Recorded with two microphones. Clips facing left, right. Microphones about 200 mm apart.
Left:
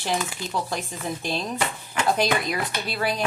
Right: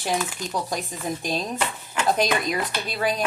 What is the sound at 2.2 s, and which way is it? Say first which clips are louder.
Speech: right 1 dB; 20° right (ahead or behind).